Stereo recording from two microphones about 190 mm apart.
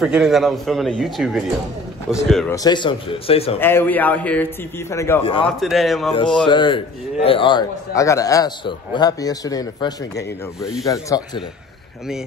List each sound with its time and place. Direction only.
0.0 s a man's voice: centre (ahead or behind)
2.5 s a man's voice: 20° left (ahead or behind)
3.5 s speech: 10° left (ahead or behind)
5.2 s a man's voice: 30° left (ahead or behind)
5.6 s a man's voice: centre (ahead or behind)
6.4 s a man's voice: 25° left (ahead or behind)